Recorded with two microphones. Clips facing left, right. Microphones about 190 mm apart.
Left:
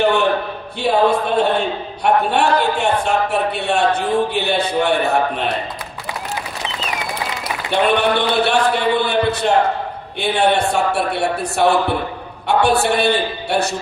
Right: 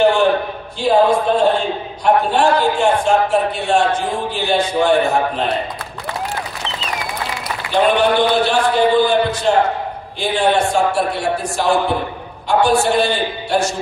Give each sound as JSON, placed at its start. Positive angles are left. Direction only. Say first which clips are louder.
{"t": 0.0, "sound": "a sound", "louder": "right 3 dB", "side_deg": 60}
{"t": 0.8, "sound": "a man's voice", "louder": "right 2 dB", "side_deg": 65}
{"t": 7.7, "sound": "a man's voice", "louder": "right 2 dB", "side_deg": 60}